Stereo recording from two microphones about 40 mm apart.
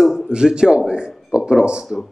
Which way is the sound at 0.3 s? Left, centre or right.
Centre.